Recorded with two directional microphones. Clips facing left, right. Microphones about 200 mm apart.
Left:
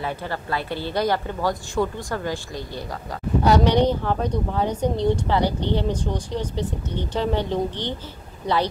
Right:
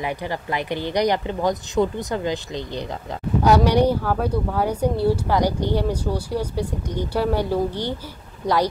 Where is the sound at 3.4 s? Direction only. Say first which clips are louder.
Right 1 dB; 10° right (ahead or behind).